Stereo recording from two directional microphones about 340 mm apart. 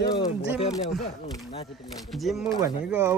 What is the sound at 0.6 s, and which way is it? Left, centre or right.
Speech, centre.